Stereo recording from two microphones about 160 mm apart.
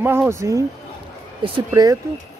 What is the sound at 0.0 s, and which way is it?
Speech, 15° right (ahead or behind).